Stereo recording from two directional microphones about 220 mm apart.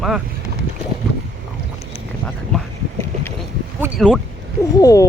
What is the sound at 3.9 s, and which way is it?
Speech, 5° right (ahead or behind).